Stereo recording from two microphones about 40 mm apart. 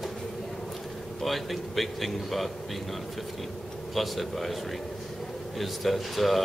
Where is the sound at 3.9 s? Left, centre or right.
Centre.